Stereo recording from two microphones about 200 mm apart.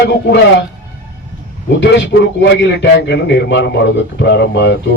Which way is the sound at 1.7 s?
65° left (ahead or behind).